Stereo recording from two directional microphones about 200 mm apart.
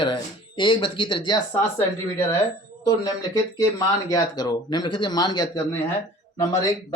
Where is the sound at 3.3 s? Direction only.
15° left (ahead or behind).